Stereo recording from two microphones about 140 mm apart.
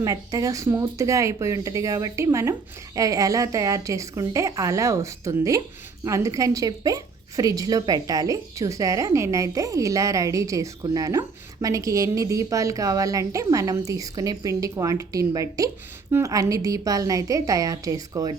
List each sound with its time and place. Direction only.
0.0 s a woman's voice: 25° right (ahead or behind)